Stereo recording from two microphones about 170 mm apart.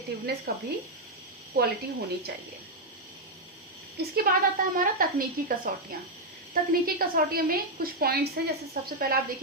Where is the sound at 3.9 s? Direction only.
65° right (ahead or behind).